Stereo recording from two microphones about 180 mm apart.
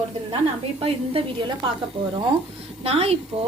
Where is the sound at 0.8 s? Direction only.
30° right (ahead or behind).